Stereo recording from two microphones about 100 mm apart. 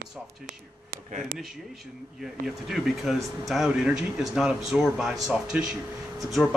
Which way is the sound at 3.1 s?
Centre (ahead or behind).